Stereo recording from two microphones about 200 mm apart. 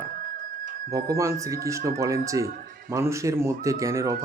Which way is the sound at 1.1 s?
15° right (ahead or behind).